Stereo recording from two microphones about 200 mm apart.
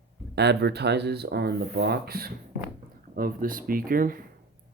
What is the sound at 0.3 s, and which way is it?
Speech, 55° right (ahead or behind).